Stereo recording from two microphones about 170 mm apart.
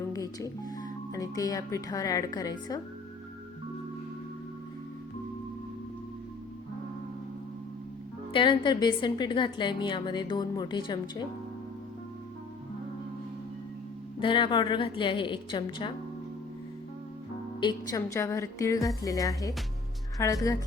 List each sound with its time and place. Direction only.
0.1 s speech: 20° left (ahead or behind)
8.3 s a woman's voice: 30° left (ahead or behind)
14.2 s a woman's voice: 30° left (ahead or behind)
17.6 s a woman's voice: 25° left (ahead or behind)